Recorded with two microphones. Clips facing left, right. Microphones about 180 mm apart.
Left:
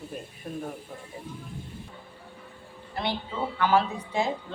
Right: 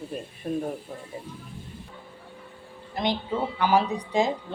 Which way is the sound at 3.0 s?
15° right (ahead or behind).